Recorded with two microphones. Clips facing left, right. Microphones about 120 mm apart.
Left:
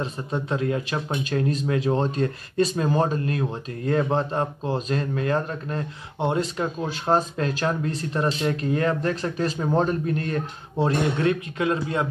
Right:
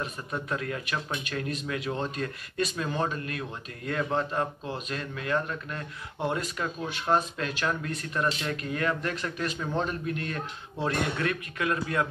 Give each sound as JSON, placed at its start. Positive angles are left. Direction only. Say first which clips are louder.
{"t": 0.0, "sound": "speech", "louder": "left 6 dB", "side_deg": 25}